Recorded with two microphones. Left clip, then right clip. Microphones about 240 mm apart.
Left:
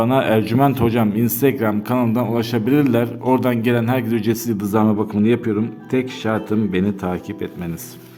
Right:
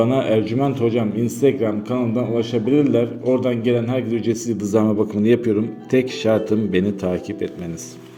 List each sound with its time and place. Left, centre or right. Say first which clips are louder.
0.0 s a man's voice: left 1 dB; left; by 7.2 s centre